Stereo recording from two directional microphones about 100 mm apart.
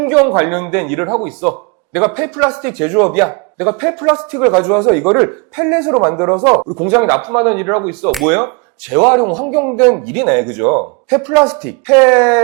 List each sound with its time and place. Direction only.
0.0 s speech: 20° right (ahead or behind)